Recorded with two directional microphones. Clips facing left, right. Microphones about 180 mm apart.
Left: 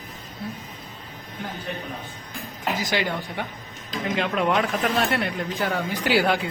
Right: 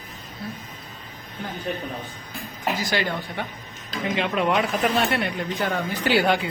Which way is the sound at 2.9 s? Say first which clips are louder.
Even; 15° left (ahead or behind).